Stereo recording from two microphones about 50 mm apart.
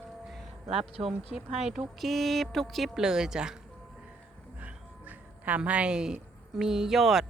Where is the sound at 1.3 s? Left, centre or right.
Centre.